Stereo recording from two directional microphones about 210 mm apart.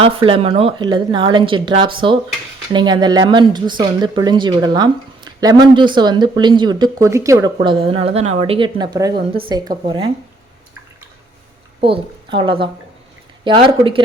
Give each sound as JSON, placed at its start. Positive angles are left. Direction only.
{"t": 0.0, "sound": "speech", "side_deg": -25}
{"t": 11.8, "sound": "a woman's voice", "side_deg": -25}